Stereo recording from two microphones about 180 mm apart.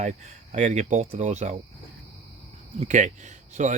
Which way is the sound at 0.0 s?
40° right (ahead or behind).